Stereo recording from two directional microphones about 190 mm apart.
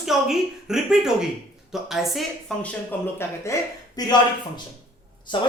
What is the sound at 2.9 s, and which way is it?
Speech, 10° left (ahead or behind).